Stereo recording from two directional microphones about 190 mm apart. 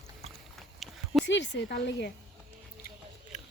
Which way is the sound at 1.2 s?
70° left (ahead or behind).